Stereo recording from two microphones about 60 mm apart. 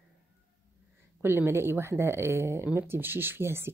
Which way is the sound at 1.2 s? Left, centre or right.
Right.